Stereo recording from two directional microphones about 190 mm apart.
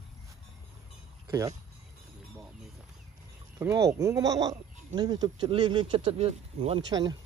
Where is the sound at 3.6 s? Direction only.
15° right (ahead or behind).